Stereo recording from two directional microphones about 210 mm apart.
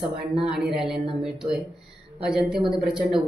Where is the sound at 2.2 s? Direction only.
5° right (ahead or behind).